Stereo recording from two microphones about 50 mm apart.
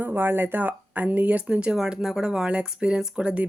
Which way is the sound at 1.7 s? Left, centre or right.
Centre.